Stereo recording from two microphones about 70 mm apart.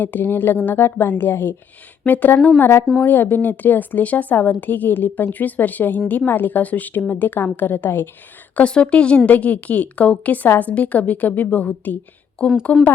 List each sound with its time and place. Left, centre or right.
0.0 s a woman's voice: left
8.5 s a woman's voice: centre